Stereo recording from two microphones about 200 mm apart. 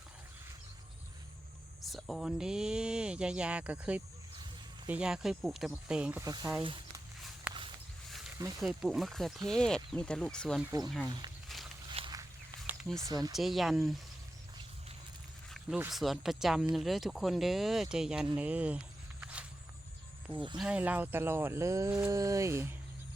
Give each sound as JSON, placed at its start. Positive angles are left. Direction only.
{"t": 1.8, "sound": "speech", "side_deg": 0}
{"t": 8.5, "sound": "speech", "side_deg": 0}
{"t": 10.6, "sound": "speech", "side_deg": -15}
{"t": 10.8, "sound": "speech", "side_deg": 0}
{"t": 11.4, "sound": "walk", "side_deg": 0}
{"t": 11.9, "sound": "walk", "side_deg": -25}
{"t": 13.1, "sound": "speech", "side_deg": -20}
{"t": 13.3, "sound": "speech", "side_deg": 0}
{"t": 15.5, "sound": "speech", "side_deg": 0}
{"t": 18.3, "sound": "a sound", "side_deg": -5}
{"t": 20.6, "sound": "speech", "side_deg": -5}